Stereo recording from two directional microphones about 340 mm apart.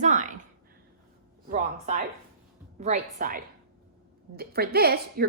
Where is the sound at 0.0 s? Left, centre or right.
Right.